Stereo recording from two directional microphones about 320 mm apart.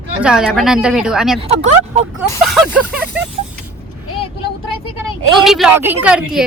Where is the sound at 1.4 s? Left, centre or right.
Centre.